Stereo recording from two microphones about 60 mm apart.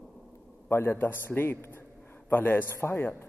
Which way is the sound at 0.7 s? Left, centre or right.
Left.